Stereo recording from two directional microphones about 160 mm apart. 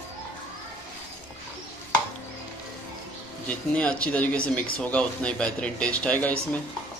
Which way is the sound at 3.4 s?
5° left (ahead or behind).